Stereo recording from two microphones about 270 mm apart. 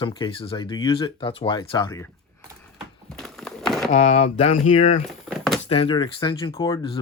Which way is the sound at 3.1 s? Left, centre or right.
Centre.